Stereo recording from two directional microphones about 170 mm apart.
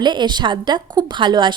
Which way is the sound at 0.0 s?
25° right (ahead or behind).